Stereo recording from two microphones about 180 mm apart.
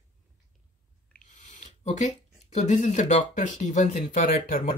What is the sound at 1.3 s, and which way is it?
Speech, 40° left (ahead or behind).